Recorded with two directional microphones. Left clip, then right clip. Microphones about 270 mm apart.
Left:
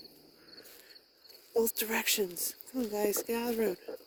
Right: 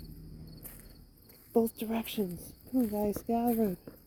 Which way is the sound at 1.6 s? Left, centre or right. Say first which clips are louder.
Left 5 dB; left.